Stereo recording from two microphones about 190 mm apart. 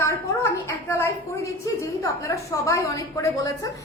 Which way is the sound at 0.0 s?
15° left (ahead or behind).